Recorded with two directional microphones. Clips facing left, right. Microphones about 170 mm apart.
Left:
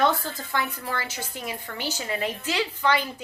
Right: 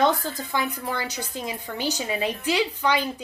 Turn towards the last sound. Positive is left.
turn(degrees=-15)  # may be behind; listen again after turning